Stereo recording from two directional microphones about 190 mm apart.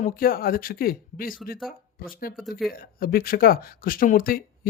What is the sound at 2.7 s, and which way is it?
Speech, 50° left (ahead or behind).